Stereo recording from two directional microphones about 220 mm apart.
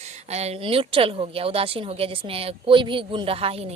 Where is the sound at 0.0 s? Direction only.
30° right (ahead or behind).